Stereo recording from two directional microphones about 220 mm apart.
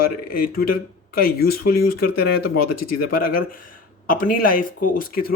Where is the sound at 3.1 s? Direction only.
40° left (ahead or behind).